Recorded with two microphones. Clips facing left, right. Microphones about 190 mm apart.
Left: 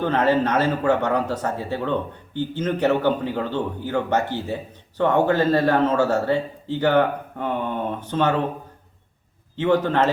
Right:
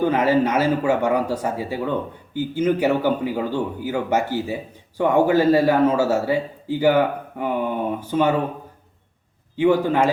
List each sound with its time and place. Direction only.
0.0 s a man's voice: 10° right (ahead or behind)
9.6 s a man's voice: 10° right (ahead or behind)